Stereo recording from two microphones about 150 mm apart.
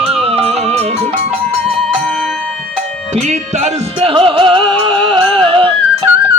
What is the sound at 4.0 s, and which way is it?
Music, 35° right (ahead or behind).